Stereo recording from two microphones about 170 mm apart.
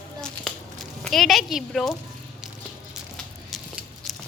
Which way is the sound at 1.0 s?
Centre (ahead or behind).